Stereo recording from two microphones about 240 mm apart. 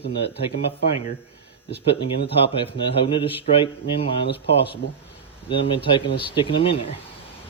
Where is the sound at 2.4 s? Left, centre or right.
Left.